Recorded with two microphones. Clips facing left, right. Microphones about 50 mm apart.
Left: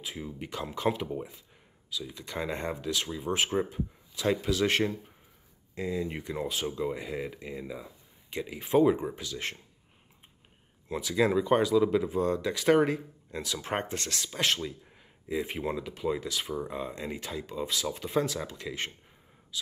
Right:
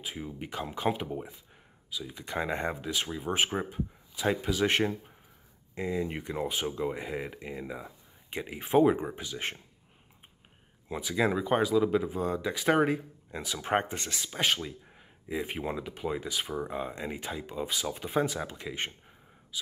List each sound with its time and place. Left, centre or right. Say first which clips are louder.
0.0 s speech: even; centre
1.0 s speech: left 1 dB; centre
2.1 s speech: right 3 dB; centre
10.9 s speech: left 2 dB; centre